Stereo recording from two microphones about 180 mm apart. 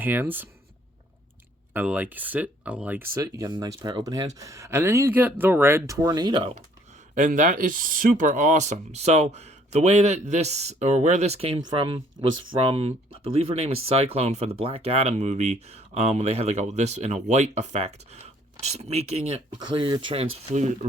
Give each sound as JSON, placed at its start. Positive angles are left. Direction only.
{"t": 0.0, "sound": "speech", "side_deg": -10}
{"t": 1.7, "sound": "speech", "side_deg": -10}
{"t": 3.2, "sound": "speech", "side_deg": -20}
{"t": 7.2, "sound": "speech", "side_deg": -45}